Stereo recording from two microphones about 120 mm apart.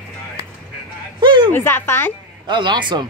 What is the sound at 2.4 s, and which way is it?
Speech, 40° right (ahead or behind).